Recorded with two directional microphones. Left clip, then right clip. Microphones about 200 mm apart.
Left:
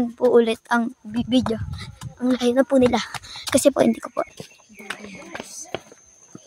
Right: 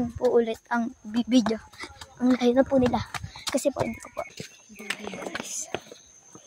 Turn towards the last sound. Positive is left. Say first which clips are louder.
# even
turn(degrees=-15)  # may be behind; listen again after turning